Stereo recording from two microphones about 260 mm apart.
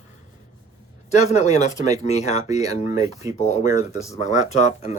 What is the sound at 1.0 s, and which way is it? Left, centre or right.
Speech, left.